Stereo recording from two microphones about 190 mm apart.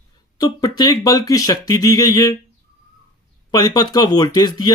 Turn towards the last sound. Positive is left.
turn(degrees=20)  # may be behind; listen again after turning